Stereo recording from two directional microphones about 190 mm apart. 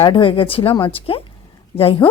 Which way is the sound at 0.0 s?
25° left (ahead or behind).